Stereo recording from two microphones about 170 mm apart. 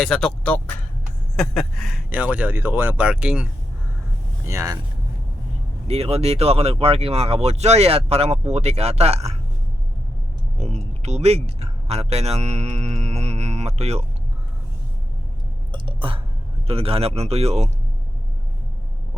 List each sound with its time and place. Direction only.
0.0 s speech: 5° left (ahead or behind)
2.0 s speech: 10° right (ahead or behind)
4.4 s speech: 20° right (ahead or behind)
5.9 s speech: 35° right (ahead or behind)
10.6 s speech: 40° right (ahead or behind)
15.7 s a sound: 30° right (ahead or behind)
16.6 s speech: 35° right (ahead or behind)